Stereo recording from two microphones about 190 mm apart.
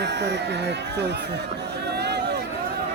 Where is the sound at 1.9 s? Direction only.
60° right (ahead or behind).